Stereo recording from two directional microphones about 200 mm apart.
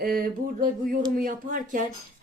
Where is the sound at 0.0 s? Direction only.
45° right (ahead or behind).